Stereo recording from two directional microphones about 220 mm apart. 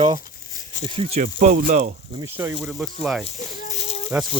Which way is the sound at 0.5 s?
35° left (ahead or behind).